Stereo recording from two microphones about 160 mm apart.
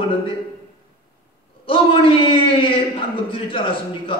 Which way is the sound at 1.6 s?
35° left (ahead or behind).